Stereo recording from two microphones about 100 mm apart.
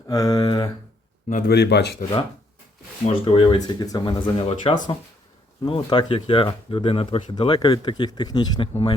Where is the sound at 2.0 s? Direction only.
90° left.